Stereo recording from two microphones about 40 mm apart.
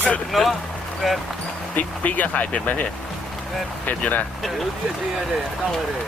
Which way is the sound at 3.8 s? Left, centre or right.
Left.